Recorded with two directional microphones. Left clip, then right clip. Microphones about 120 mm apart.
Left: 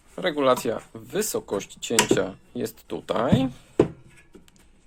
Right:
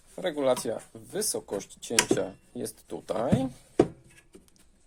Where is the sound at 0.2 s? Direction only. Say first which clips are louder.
Left 5 dB; 10° right (ahead or behind).